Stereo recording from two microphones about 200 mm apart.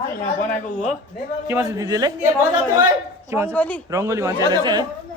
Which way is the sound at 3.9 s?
15° right (ahead or behind).